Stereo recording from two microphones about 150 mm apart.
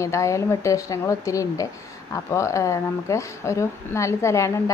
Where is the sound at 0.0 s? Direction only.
20° left (ahead or behind).